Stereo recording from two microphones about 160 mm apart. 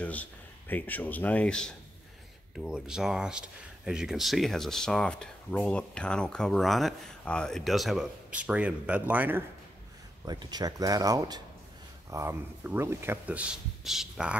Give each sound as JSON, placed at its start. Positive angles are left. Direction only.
{"t": 0.0, "sound": "speech", "side_deg": 10}
{"t": 2.5, "sound": "speech", "side_deg": -5}
{"t": 10.2, "sound": "speech", "side_deg": -25}